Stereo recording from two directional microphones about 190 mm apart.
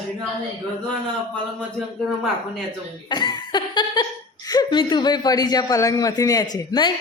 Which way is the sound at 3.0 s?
20° left (ahead or behind).